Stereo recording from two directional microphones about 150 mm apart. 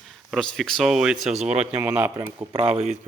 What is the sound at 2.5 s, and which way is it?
Speech, 40° right (ahead or behind).